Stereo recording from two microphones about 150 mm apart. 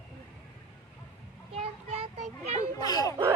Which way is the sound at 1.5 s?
40° right (ahead or behind).